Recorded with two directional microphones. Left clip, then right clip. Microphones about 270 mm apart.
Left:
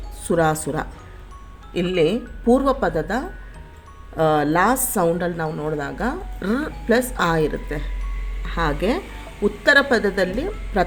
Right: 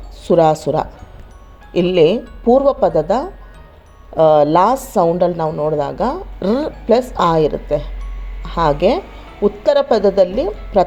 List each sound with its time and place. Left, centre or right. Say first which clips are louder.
0.3 s a woman's voice: right 8 dB; centre